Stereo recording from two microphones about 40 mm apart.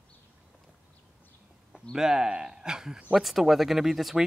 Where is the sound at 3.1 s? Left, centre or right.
Centre.